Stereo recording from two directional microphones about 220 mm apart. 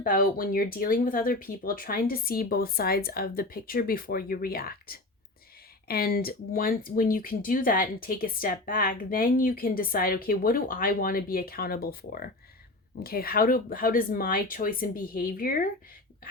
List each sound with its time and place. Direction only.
0.0 s speech: 40° left (ahead or behind)